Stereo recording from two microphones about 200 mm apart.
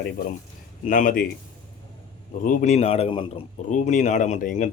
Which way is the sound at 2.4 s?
35° left (ahead or behind).